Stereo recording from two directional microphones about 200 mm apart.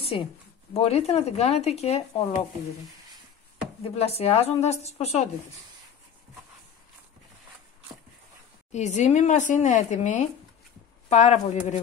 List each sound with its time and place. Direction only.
0.0 s speech: 30° left (ahead or behind)
3.9 s speech: 30° left (ahead or behind)
8.7 s speech: 35° left (ahead or behind)